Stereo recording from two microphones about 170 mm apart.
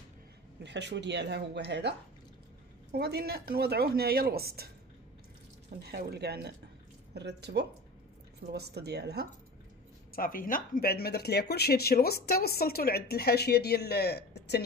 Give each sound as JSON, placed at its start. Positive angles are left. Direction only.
{"t": 0.7, "sound": "speech", "side_deg": -90}
{"t": 2.9, "sound": "speech", "side_deg": -70}
{"t": 5.7, "sound": "speech", "side_deg": -65}
{"t": 10.1, "sound": "speech", "side_deg": 55}